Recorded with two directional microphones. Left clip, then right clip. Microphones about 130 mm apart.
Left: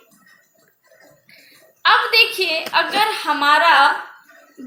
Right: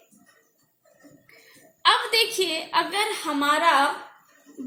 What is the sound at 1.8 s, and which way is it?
A woman's voice, 40° right (ahead or behind).